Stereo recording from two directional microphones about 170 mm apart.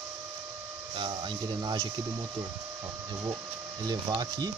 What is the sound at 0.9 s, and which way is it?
Speech, 30° right (ahead or behind).